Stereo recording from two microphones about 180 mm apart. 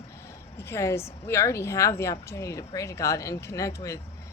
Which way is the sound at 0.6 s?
15° left (ahead or behind).